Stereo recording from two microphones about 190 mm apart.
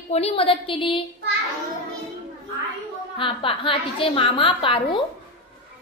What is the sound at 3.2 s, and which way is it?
A woman's voice, 30° left (ahead or behind).